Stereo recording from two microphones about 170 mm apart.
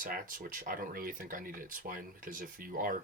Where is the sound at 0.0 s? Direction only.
55° right (ahead or behind).